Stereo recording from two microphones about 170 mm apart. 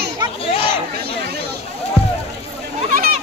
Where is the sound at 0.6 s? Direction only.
75° right (ahead or behind).